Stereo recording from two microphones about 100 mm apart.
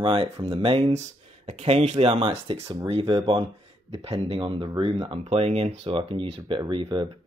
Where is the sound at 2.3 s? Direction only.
90° right.